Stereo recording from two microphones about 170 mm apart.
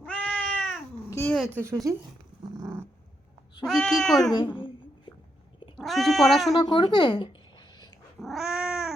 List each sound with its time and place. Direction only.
0.0 s cat: 5° left (ahead or behind)
1.1 s speech: 15° left (ahead or behind)
1.5 s a woman's voice: 15° right (ahead or behind)
2.6 s dog: 20° right (ahead or behind)
3.7 s speech: 5° left (ahead or behind)
4.3 s a sound: 25° left (ahead or behind)
5.7 s speech: centre (ahead or behind)
6.6 s speech: 25° left (ahead or behind)
8.2 s cat: centre (ahead or behind)